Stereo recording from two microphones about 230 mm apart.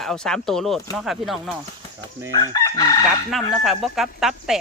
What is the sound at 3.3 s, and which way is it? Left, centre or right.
A man's voice, centre.